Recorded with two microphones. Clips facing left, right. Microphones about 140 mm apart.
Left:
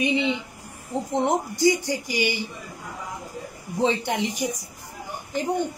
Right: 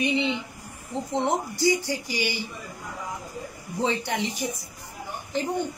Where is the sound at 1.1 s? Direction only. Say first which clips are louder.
Left 2 dB; 15° left (ahead or behind).